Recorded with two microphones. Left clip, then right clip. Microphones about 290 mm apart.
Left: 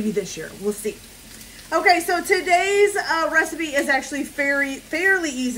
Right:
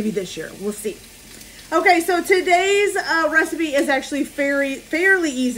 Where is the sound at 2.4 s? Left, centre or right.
Left.